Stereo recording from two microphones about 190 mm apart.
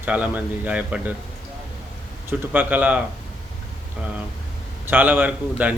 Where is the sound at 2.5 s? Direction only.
10° right (ahead or behind).